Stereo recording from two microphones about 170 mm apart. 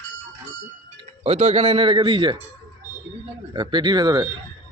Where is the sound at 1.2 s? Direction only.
40° right (ahead or behind).